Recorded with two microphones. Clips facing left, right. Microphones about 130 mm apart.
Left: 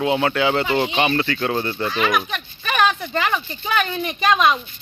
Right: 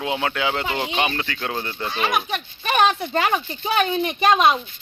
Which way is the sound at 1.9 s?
25° right (ahead or behind).